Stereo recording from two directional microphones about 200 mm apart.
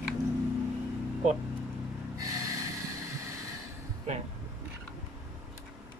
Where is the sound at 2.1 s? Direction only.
15° right (ahead or behind).